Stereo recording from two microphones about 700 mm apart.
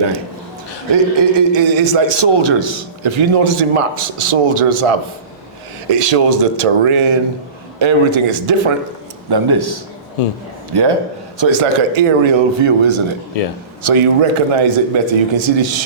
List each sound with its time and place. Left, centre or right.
0.9 s a man's voice: right
9.3 s a man's voice: right